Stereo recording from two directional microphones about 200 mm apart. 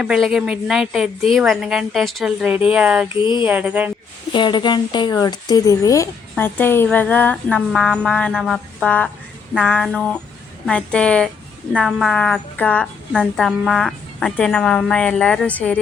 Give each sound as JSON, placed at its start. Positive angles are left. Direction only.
{"t": 0.0, "sound": "a woman's voice", "side_deg": -5}
{"t": 3.2, "sound": "a sound", "side_deg": 25}
{"t": 3.4, "sound": "speech", "side_deg": -10}
{"t": 4.3, "sound": "a woman's voice", "side_deg": 25}